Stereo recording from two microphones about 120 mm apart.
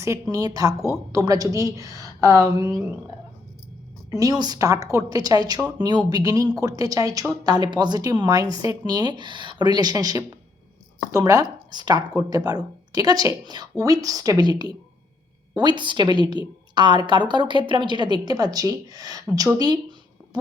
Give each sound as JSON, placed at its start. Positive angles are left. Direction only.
{"t": 0.0, "sound": "a woman's voice", "side_deg": -25}
{"t": 4.1, "sound": "a woman's voice", "side_deg": -30}